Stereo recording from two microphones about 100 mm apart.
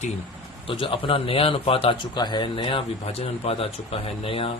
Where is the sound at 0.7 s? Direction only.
60° left (ahead or behind).